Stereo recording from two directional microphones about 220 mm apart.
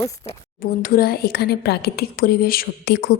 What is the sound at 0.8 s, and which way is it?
A woman's voice, 40° left (ahead or behind).